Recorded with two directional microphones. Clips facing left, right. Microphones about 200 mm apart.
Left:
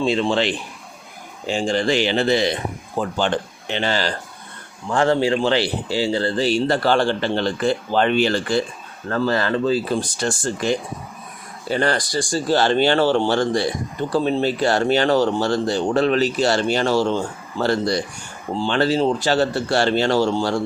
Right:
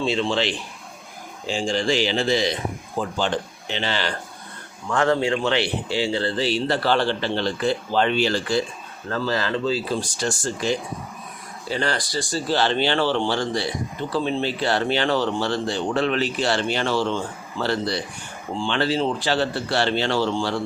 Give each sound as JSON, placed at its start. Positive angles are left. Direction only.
{"t": 0.0, "sound": "a man's voice", "side_deg": 50}
{"t": 4.9, "sound": "a man's voice", "side_deg": 30}